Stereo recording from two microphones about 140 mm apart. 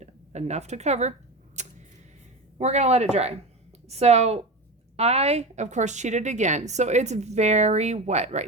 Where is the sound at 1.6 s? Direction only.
55° right (ahead or behind).